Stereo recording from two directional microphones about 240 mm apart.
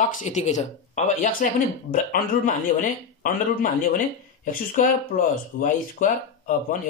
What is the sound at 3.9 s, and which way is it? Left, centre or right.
Speech, left.